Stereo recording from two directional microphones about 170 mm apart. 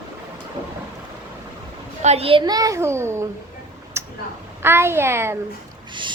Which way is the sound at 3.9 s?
15° right (ahead or behind).